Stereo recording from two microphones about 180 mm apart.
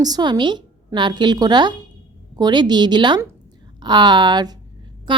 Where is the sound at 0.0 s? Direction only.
25° right (ahead or behind).